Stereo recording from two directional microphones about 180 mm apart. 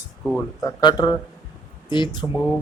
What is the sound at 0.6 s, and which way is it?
Speech, 20° left (ahead or behind).